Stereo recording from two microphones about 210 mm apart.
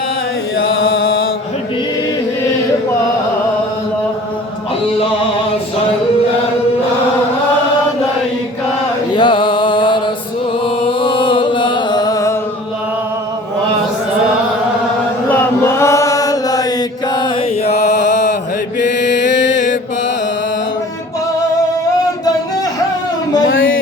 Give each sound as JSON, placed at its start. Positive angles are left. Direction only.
{"t": 1.0, "sound": "chant", "side_deg": 45}
{"t": 9.1, "sound": "music", "side_deg": 20}
{"t": 15.3, "sound": "chant", "side_deg": 10}
{"t": 17.2, "sound": "mantra", "side_deg": 25}
{"t": 18.9, "sound": "music", "side_deg": 60}